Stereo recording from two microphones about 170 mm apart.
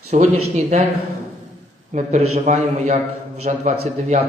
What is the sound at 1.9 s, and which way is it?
A man's voice, 45° right (ahead or behind).